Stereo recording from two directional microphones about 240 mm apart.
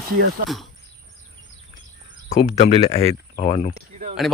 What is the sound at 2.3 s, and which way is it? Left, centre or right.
Speech, left.